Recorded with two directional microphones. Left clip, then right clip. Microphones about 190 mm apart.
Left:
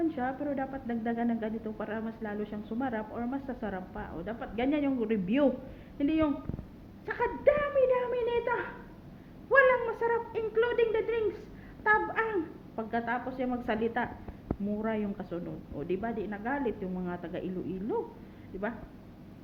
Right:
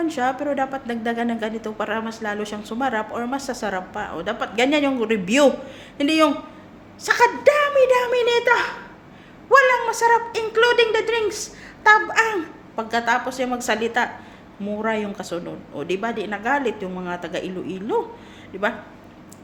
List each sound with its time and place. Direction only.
0.1 s a woman's voice: 20° right (ahead or behind)